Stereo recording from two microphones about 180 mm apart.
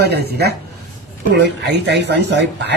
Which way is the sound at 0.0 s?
65° right (ahead or behind).